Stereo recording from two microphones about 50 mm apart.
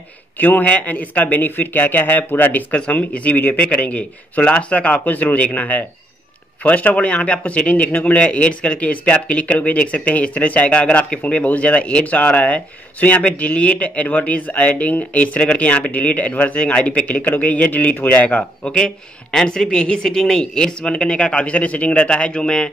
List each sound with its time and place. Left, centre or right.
0.4 s speech: left
3.6 s a man's voice: left
18.6 s speech: centre